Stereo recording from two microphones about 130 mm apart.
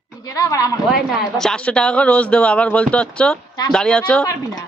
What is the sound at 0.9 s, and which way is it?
Speech, 5° right (ahead or behind).